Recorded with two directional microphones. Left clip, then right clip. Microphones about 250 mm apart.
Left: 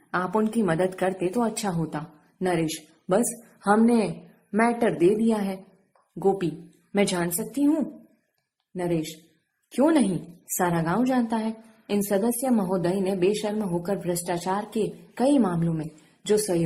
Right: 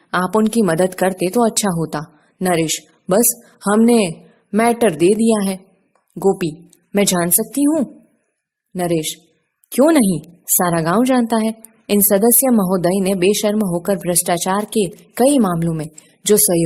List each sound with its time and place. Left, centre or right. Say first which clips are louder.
0.1 s speech: right 8 dB; right
6.1 s a woman's voice: right 7 dB; right